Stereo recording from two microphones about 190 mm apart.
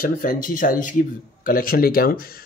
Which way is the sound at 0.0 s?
50° left (ahead or behind).